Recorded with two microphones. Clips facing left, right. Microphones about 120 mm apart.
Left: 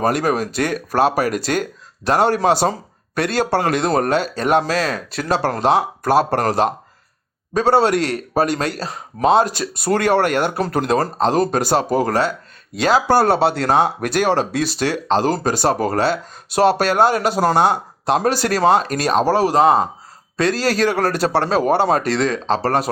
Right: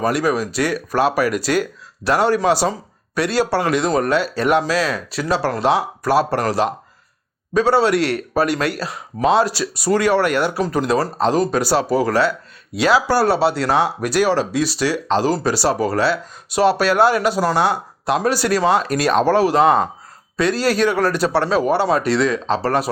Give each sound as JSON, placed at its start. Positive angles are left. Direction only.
{"t": 0.0, "sound": "speech", "side_deg": 50}
{"t": 8.4, "sound": "speech", "side_deg": 30}